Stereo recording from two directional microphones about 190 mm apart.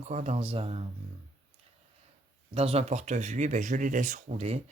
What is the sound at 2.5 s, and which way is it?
Speech, 30° right (ahead or behind).